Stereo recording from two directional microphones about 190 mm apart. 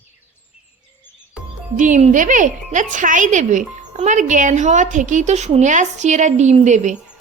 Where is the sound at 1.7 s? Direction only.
40° right (ahead or behind).